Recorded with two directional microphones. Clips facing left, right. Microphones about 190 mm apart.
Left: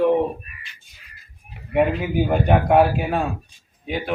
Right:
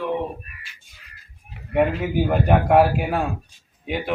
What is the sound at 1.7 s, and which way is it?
A man's voice, centre (ahead or behind).